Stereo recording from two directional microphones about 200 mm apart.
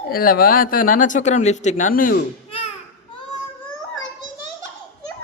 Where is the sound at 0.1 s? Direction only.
45° left (ahead or behind).